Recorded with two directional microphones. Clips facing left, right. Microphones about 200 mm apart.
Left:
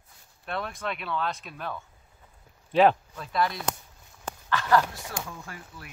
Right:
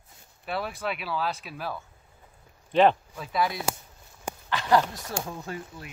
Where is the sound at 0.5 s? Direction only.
5° right (ahead or behind).